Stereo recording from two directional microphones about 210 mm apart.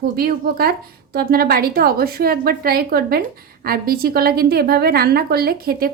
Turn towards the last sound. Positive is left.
turn(degrees=-45)  # may be behind; listen again after turning